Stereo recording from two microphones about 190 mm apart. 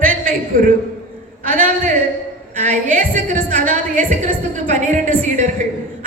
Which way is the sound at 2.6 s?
40° right (ahead or behind).